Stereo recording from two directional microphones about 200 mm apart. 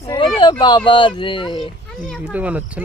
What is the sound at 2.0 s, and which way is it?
Speech, 5° left (ahead or behind).